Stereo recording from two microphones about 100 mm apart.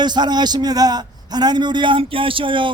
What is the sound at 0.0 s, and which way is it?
A man's voice, 45° right (ahead or behind).